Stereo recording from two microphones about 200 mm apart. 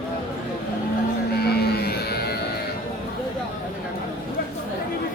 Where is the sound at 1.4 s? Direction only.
55° left (ahead or behind).